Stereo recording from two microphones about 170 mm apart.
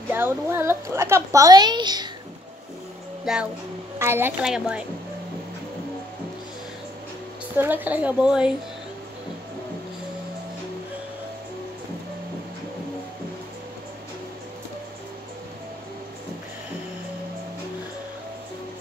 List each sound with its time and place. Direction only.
0.1 s a woman's voice: 15° right (ahead or behind)
3.3 s speech: centre (ahead or behind)
4.0 s a woman's voice: 15° right (ahead or behind)
7.5 s a woman's voice: 10° right (ahead or behind)